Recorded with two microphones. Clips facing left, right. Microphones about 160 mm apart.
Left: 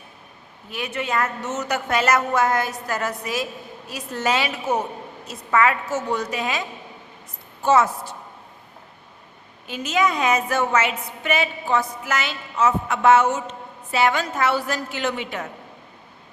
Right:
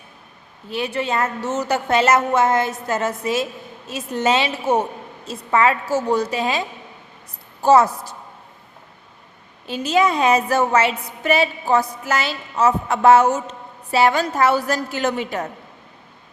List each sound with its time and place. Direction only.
0.7 s a woman's voice: 30° right (ahead or behind)
9.6 s a woman's voice: 30° right (ahead or behind)